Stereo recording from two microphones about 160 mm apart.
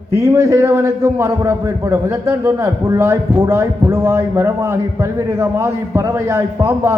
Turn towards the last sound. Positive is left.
turn(degrees=-15)  # may be behind; listen again after turning